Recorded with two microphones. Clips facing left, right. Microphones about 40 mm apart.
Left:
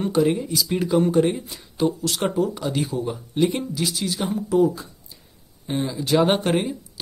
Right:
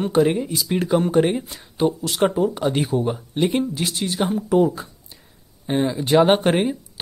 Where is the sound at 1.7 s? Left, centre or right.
Centre.